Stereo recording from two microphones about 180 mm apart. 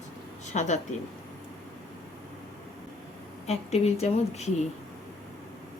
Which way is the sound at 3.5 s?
35° left (ahead or behind).